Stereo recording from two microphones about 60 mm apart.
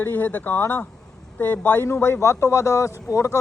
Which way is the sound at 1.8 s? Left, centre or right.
Left.